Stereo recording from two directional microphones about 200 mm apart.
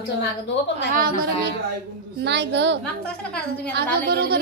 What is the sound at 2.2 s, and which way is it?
Speech, 60° right (ahead or behind).